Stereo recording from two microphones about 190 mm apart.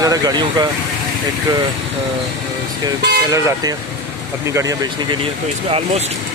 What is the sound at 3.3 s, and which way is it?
Speech, 15° right (ahead or behind).